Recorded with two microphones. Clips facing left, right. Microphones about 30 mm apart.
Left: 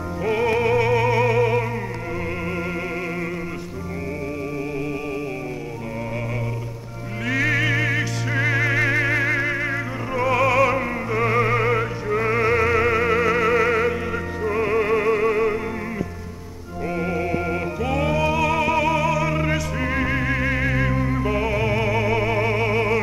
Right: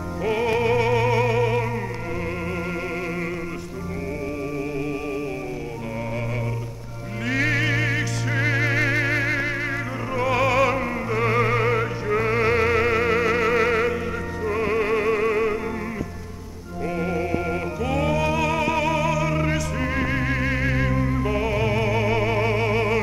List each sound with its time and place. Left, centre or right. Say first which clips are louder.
0.2 s music: left 1 dB; centre
7.7 s music: left 2 dB; centre
8.7 s theremin: left 2 dB; centre
9.3 s music: left 2 dB; right
10.3 s opera: left 2 dB; centre
11.2 s music: left 1 dB; centre
12.5 s music: left 1 dB; centre
13.2 s music: left 1 dB; centre
16.9 s music: left 1 dB; centre